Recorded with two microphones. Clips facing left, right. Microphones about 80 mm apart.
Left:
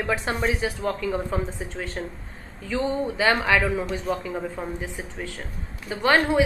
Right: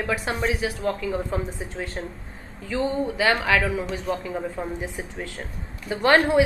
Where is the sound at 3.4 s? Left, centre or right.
Centre.